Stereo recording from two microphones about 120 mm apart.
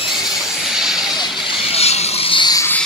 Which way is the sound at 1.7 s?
60° left (ahead or behind).